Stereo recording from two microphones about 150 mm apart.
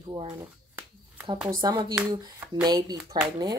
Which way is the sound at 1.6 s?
25° right (ahead or behind).